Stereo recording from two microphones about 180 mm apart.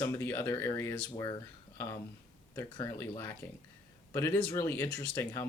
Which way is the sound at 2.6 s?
15° left (ahead or behind).